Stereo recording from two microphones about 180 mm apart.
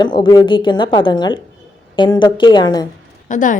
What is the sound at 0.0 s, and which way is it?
A woman's voice, 25° left (ahead or behind).